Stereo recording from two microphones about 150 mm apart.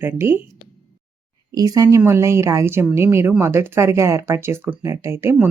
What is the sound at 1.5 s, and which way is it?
Speech, 25° right (ahead or behind).